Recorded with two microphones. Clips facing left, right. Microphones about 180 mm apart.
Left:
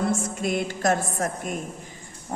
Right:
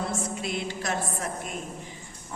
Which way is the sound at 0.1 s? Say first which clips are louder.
Left 5 dB; 45° left (ahead or behind).